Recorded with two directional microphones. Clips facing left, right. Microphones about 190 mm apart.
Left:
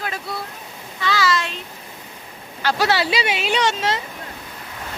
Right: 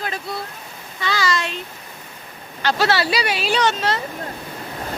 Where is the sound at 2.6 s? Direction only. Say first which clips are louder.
Even; 10° left (ahead or behind).